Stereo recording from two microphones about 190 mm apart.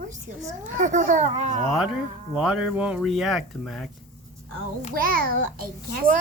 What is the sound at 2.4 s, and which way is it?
Speech, 5° right (ahead or behind).